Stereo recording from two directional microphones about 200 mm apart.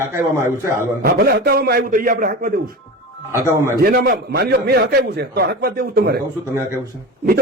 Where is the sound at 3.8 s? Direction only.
50° right (ahead or behind).